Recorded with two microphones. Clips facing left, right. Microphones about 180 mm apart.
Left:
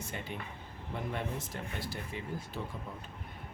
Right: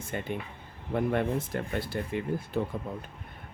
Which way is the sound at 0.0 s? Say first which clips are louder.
Right 7 dB; 50° right (ahead or behind).